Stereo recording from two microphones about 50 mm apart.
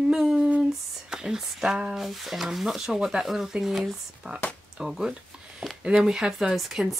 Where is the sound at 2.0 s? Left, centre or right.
Centre.